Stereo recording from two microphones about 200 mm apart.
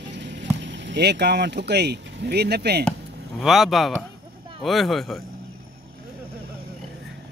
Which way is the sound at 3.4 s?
Centre (ahead or behind).